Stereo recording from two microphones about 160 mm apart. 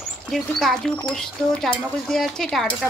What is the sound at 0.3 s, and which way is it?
Speech, centre (ahead or behind).